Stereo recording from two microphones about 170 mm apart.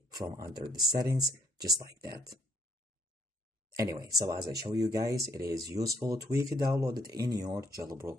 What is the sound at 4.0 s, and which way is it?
Speech, 20° right (ahead or behind).